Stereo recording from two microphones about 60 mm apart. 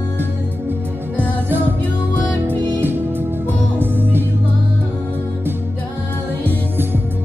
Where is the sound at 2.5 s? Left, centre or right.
Right.